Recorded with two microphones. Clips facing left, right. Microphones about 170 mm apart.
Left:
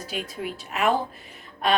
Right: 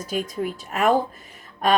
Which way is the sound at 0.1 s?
45° right (ahead or behind).